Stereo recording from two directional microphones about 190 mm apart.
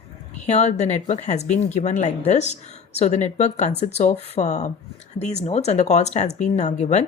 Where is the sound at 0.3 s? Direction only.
35° left (ahead or behind).